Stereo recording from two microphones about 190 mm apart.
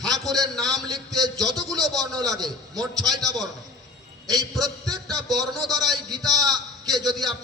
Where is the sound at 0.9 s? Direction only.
20° right (ahead or behind).